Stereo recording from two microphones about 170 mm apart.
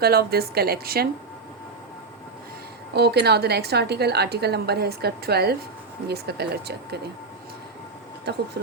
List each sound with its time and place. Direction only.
0.0 s a woman's voice: 65° right (ahead or behind)
2.9 s a woman's voice: 75° right (ahead or behind)
8.3 s a woman's voice: 75° right (ahead or behind)